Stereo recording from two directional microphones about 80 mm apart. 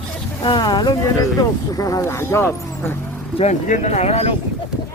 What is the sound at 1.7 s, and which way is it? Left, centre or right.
Speech, left.